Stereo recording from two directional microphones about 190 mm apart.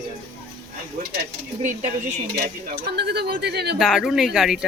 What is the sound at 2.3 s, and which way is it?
Speech, 55° right (ahead or behind).